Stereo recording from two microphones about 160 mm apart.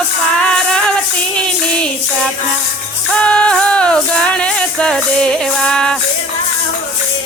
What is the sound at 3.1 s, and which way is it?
Music, 5° left (ahead or behind).